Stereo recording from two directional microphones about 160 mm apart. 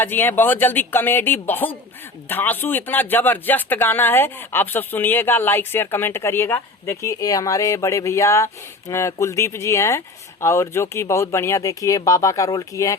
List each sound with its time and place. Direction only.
0.0 s speech: 10° left (ahead or behind)